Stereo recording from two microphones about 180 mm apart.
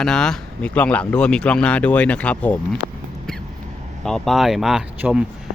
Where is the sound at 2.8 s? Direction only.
80° left.